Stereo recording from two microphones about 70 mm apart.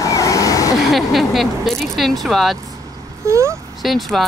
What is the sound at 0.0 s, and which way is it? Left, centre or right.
Vehicle, left.